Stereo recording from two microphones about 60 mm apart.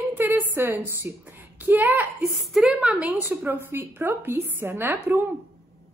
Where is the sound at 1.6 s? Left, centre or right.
Right.